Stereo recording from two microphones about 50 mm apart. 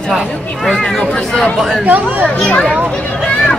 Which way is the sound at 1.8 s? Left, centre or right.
Right.